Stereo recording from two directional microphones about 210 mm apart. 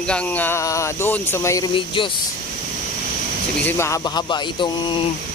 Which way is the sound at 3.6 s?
10° left (ahead or behind).